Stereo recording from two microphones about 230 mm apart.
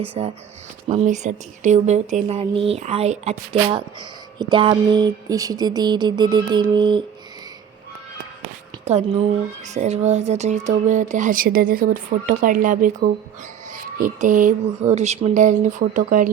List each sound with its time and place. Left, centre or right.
0.0 s speech: right
8.8 s a woman's voice: right